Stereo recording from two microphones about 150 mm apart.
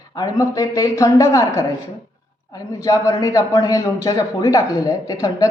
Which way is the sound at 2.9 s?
20° left (ahead or behind).